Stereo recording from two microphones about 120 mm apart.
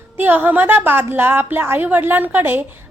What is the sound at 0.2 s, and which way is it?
A woman's voice, 15° right (ahead or behind).